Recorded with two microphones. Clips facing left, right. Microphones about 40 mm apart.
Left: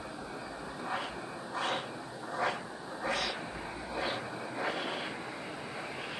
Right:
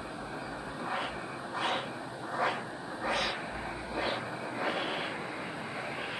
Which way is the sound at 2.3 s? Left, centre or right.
Centre.